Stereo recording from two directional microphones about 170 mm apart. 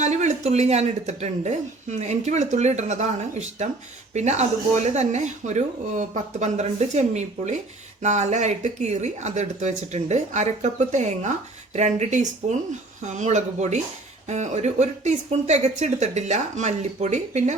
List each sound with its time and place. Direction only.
0.0 s speech: 45° right (ahead or behind)